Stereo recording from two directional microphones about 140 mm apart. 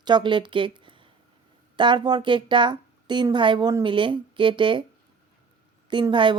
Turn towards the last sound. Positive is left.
turn(degrees=-35)  # may be behind; listen again after turning